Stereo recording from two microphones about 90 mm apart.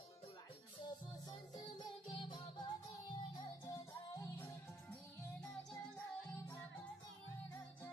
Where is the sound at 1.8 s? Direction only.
55° left (ahead or behind).